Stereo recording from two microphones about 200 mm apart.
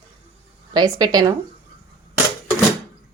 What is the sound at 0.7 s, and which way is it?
Speech, 20° right (ahead or behind).